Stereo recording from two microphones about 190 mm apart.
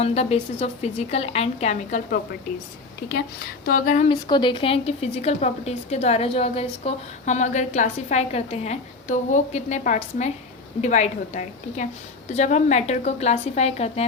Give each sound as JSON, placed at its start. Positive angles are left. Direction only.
{"t": 0.0, "sound": "a woman's voice", "side_deg": 35}
{"t": 3.7, "sound": "a woman's voice", "side_deg": 45}
{"t": 4.3, "sound": "a woman's voice", "side_deg": 25}